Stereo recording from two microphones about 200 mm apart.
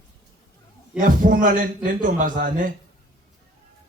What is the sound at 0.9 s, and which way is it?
A man's voice, 40° right (ahead or behind).